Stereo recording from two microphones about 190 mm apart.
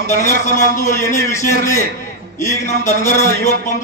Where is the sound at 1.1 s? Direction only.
40° left (ahead or behind).